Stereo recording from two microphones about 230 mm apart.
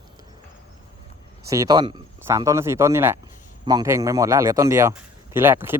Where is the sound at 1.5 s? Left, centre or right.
Centre.